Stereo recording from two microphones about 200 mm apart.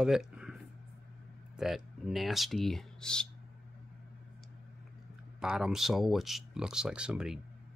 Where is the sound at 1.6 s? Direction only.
Centre (ahead or behind).